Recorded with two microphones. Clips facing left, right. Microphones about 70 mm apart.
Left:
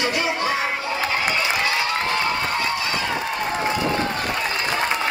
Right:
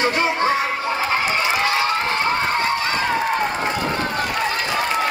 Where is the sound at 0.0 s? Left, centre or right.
Right.